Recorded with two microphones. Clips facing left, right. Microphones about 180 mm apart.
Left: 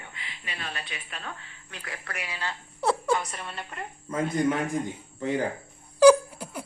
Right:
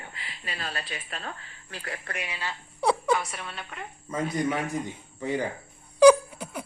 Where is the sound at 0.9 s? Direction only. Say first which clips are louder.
Right 2 dB; 40° right (ahead or behind).